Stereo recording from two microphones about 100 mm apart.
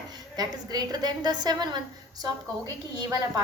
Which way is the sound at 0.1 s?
45° right (ahead or behind).